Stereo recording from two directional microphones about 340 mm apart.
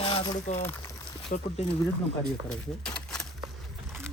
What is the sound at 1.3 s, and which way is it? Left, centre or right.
Speech, left.